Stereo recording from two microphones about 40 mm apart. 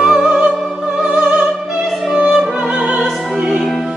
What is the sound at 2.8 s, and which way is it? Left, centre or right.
Music, right.